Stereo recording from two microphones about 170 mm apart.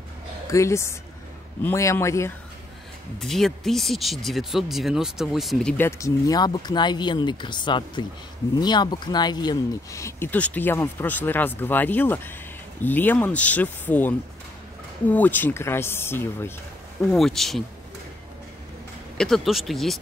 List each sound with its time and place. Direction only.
0.5 s speech: 15° left (ahead or behind)
3.2 s speech: centre (ahead or behind)
17.1 s speech: centre (ahead or behind)
19.1 s speech: centre (ahead or behind)